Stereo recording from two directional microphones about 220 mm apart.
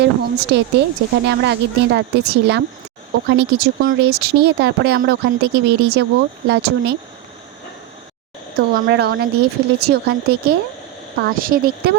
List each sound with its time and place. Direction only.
0.0 s speech: 50° right (ahead or behind)
8.5 s speech: 45° right (ahead or behind)